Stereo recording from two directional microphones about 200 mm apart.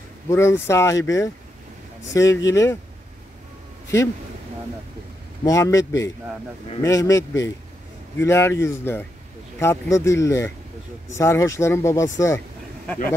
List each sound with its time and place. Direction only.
0.3 s speech: 15° left (ahead or behind)
5.4 s speech: 15° left (ahead or behind)